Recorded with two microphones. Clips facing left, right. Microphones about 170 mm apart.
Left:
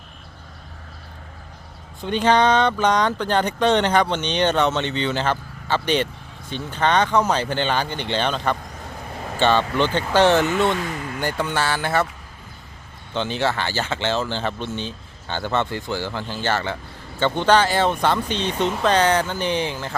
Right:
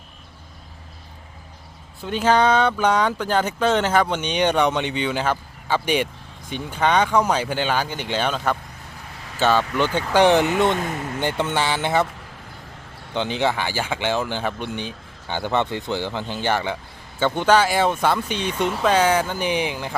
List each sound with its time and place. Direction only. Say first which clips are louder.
2.0 s speech: left 1 dB; 5° right (ahead or behind)
13.1 s speech: right 1 dB; 15° right (ahead or behind)